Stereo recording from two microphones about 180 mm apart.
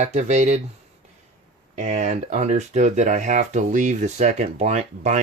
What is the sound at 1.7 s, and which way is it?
Speech, 40° right (ahead or behind).